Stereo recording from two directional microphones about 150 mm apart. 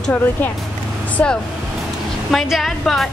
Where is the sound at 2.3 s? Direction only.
Centre (ahead or behind).